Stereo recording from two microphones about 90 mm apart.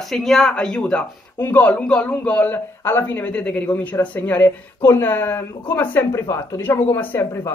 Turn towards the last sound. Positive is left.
turn(degrees=30)  # may be behind; listen again after turning